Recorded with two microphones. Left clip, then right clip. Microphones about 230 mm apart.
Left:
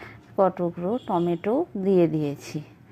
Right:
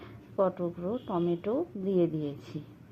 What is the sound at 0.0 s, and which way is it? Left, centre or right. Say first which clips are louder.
A woman's voice: left 7 dB; left.